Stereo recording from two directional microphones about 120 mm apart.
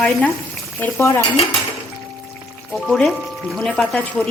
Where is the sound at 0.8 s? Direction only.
20° left (ahead or behind).